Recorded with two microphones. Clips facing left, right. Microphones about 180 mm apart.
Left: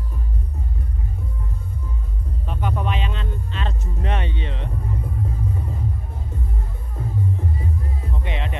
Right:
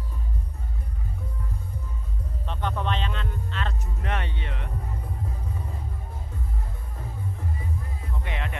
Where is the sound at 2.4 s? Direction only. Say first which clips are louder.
Left 3 dB; 10° left (ahead or behind).